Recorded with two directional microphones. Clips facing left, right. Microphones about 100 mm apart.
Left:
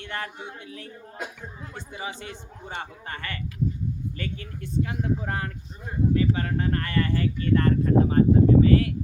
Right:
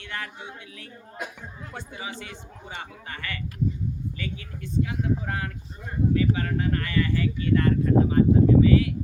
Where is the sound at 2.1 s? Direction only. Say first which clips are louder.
Left 1 dB; 30° left (ahead or behind).